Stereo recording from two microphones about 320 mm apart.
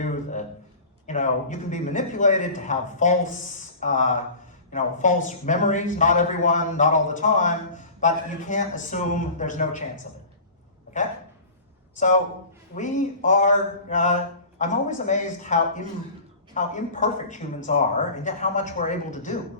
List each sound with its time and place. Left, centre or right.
1.0 s a man's voice: left
11.9 s a man's voice: left